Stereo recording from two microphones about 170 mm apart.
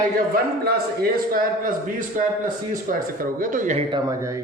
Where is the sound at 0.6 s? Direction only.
60° right (ahead or behind).